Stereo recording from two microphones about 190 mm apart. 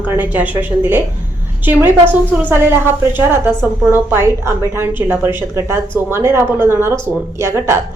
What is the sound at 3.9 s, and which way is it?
A woman's voice, 10° right (ahead or behind).